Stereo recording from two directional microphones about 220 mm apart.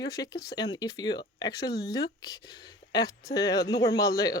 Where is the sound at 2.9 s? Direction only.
15° left (ahead or behind).